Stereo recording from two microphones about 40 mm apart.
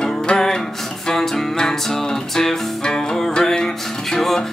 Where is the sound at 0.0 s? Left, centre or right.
Centre.